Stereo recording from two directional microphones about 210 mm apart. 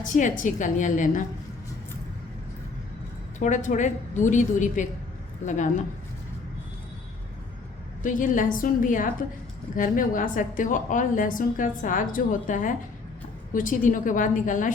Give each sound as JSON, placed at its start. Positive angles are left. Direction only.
{"t": 0.0, "sound": "a woman's voice", "side_deg": 35}
{"t": 3.3, "sound": "a woman's voice", "side_deg": 35}
{"t": 8.0, "sound": "a woman's voice", "side_deg": 40}